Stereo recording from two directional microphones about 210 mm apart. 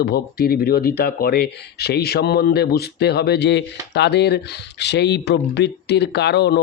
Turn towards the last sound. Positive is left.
turn(degrees=55)  # may be behind; listen again after turning